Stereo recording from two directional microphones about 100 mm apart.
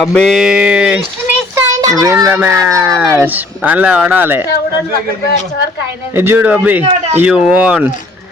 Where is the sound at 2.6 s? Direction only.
30° right (ahead or behind).